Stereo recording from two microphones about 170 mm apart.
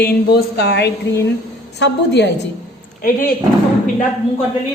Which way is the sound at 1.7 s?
90° left.